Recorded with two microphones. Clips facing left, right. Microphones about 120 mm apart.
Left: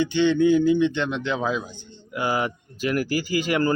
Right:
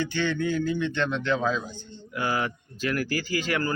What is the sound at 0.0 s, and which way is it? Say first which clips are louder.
Speech: left 8 dB; 15° left (ahead or behind).